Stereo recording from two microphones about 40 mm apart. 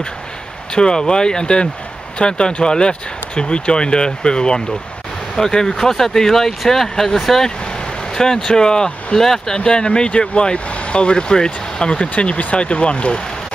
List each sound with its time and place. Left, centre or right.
0.7 s speech: centre
8.1 s speech: centre
9.6 s speech: left